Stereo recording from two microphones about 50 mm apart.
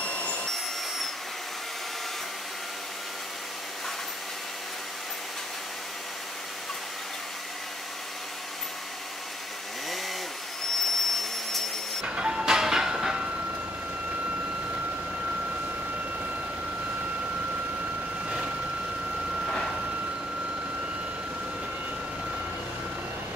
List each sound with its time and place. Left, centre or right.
0.0 s vacuum cleaner: left
0.5 s vacuum cleaner: centre
10.8 s vacuum cleaner: centre
12.2 s music: centre